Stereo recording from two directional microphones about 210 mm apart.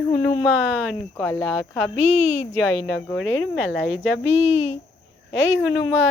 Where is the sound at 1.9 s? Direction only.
30° left (ahead or behind).